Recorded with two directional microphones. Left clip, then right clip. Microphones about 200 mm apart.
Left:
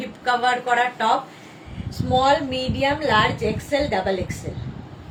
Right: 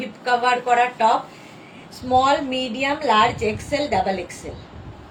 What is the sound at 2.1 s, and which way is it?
A woman's voice, 15° left (ahead or behind).